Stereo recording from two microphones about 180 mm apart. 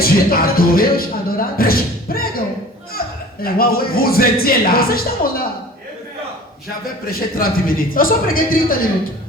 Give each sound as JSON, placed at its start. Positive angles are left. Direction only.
{"t": 0.0, "sound": "speech", "side_deg": 55}
{"t": 3.4, "sound": "speech", "side_deg": 55}
{"t": 7.1, "sound": "a man's voice", "side_deg": 55}